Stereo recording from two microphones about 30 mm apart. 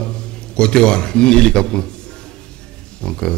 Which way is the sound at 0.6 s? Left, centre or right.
Left.